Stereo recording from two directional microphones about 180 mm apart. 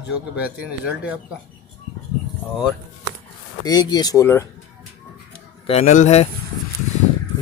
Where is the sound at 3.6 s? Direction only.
20° left (ahead or behind).